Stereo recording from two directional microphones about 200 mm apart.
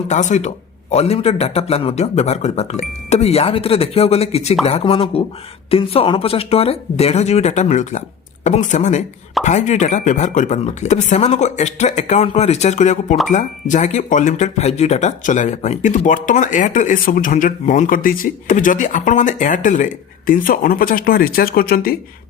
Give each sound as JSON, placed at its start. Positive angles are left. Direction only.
{"t": 0.1, "sound": "speech", "side_deg": 35}